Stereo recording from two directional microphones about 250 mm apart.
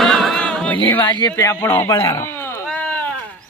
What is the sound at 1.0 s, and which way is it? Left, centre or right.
Speech, centre.